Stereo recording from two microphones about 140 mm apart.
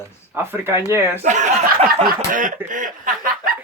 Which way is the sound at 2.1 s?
70° right (ahead or behind).